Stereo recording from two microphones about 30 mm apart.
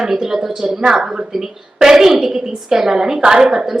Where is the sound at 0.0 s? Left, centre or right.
Centre.